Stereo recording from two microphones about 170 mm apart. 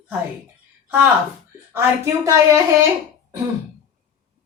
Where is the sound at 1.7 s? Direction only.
15° right (ahead or behind).